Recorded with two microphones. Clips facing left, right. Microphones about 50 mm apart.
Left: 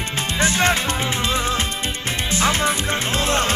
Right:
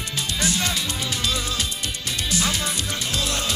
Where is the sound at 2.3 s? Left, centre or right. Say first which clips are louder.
Left 7 dB; left.